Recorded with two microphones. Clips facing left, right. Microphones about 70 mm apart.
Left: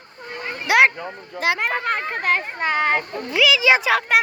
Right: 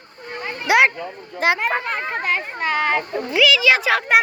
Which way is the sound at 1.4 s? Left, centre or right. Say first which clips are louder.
Right 3 dB; right.